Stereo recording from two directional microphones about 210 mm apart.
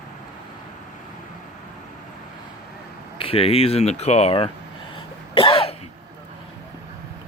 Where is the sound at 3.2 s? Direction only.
25° left (ahead or behind).